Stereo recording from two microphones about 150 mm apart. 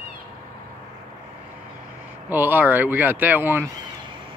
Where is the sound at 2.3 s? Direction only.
15° right (ahead or behind).